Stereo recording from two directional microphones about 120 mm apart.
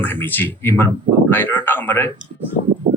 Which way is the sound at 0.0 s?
15° left (ahead or behind).